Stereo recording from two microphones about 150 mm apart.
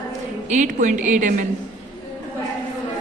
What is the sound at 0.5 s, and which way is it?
Speech, 55° right (ahead or behind).